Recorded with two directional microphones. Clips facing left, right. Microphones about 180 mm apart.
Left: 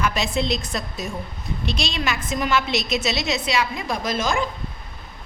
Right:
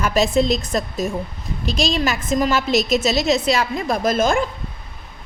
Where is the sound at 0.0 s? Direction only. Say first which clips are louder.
Right 6 dB; 45° right (ahead or behind).